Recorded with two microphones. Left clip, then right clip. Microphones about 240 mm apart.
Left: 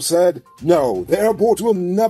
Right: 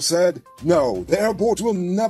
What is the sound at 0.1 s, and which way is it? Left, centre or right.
Speech, right.